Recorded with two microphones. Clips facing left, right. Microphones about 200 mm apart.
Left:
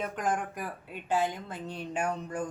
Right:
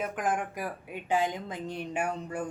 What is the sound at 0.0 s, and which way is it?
Speech, 5° right (ahead or behind).